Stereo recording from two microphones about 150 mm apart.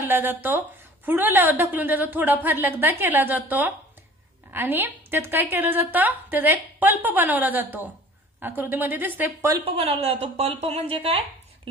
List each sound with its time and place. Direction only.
0.1 s a woman's voice: 15° right (ahead or behind)
9.5 s a woman's voice: 40° right (ahead or behind)